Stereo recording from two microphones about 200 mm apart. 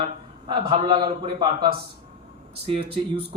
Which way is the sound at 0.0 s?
25° right (ahead or behind).